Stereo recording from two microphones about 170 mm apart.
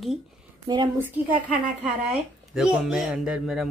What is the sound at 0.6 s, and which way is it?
Speech, 25° right (ahead or behind).